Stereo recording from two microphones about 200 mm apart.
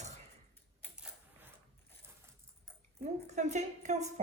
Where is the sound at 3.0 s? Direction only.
35° right (ahead or behind).